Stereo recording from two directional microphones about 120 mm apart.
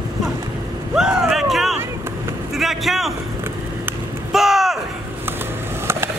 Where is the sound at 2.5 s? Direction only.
Centre (ahead or behind).